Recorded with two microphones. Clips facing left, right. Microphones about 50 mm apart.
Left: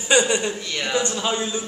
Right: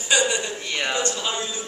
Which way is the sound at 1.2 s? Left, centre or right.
Left.